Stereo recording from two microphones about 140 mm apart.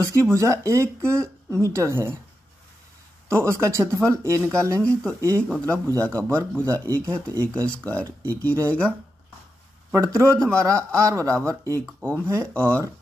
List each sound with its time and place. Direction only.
0.0 s speech: 20° right (ahead or behind)
3.3 s speech: 20° right (ahead or behind)
8.2 s speech: 10° left (ahead or behind)
8.5 s speech: 15° right (ahead or behind)
10.1 s speech: 20° right (ahead or behind)
11.8 s speech: 10° left (ahead or behind)
12.3 s speech: 15° right (ahead or behind)